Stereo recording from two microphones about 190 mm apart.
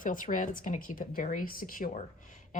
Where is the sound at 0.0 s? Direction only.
45° left (ahead or behind).